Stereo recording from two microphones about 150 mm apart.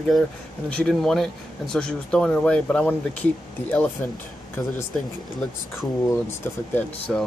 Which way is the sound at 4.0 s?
15° left (ahead or behind).